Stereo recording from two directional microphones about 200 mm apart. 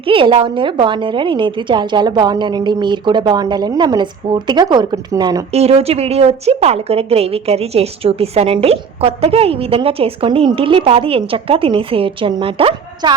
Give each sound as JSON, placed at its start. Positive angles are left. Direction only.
{"t": 0.1, "sound": "a woman's voice", "side_deg": -25}
{"t": 5.5, "sound": "a woman's voice", "side_deg": -30}